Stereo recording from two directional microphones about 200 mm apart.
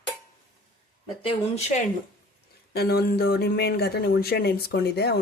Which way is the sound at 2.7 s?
50° left (ahead or behind).